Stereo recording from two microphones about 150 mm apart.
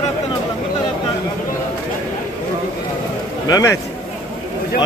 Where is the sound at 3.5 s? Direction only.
20° left (ahead or behind).